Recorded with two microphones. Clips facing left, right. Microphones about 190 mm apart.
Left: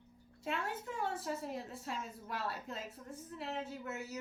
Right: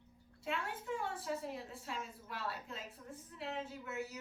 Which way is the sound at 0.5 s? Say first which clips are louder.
Left 1 dB; 40° left (ahead or behind).